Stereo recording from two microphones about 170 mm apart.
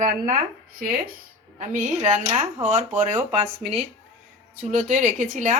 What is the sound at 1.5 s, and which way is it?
Speech, 50° right (ahead or behind).